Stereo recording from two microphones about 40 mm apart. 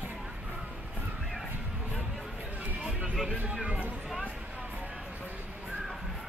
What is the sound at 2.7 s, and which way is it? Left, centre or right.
Music, right.